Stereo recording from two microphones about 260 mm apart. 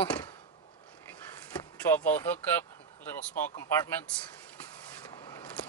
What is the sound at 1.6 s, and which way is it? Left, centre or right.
Speech, centre.